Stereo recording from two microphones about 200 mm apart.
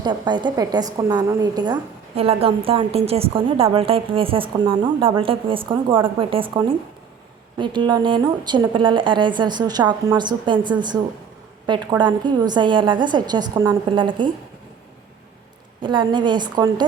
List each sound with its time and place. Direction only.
0.0 s a woman's voice: 20° right (ahead or behind)
15.8 s a woman's voice: 25° right (ahead or behind)